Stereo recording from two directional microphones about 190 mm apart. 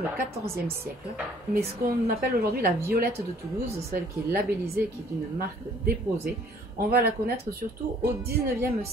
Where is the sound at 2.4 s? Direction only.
50° right (ahead or behind).